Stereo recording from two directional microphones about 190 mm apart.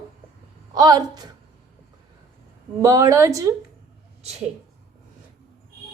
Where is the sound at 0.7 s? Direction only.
20° right (ahead or behind).